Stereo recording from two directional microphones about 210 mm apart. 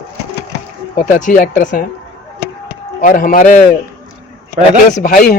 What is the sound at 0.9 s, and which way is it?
Speech, 35° left (ahead or behind).